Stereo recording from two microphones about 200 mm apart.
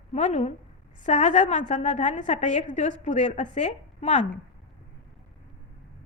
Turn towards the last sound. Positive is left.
turn(degrees=35)  # may be behind; listen again after turning